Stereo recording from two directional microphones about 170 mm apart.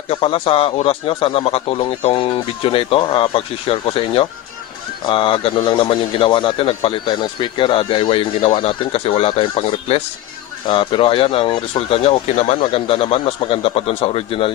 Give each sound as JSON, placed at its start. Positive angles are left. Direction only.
{"t": 0.1, "sound": "a man's voice", "side_deg": 35}